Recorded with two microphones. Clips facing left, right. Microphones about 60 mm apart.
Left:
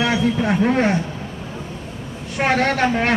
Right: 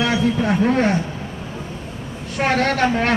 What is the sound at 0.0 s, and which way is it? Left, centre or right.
Speech, centre.